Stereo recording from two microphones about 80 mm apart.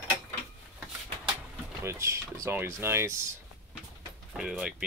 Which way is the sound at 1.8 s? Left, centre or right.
Right.